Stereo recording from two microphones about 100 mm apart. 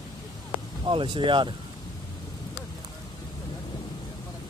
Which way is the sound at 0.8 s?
55° right (ahead or behind).